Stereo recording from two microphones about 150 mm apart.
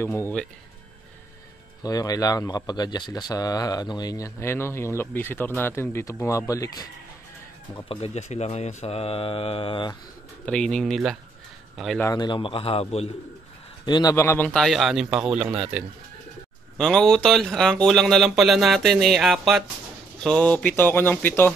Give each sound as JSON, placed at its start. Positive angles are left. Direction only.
{"t": 0.0, "sound": "speech", "side_deg": 15}
{"t": 1.8, "sound": "speech", "side_deg": 25}
{"t": 7.7, "sound": "speech", "side_deg": 40}
{"t": 10.4, "sound": "speech", "side_deg": 5}
{"t": 12.0, "sound": "speech", "side_deg": 25}
{"t": 13.8, "sound": "speech", "side_deg": 30}
{"t": 14.1, "sound": "speech", "side_deg": 15}
{"t": 16.7, "sound": "speech", "side_deg": 5}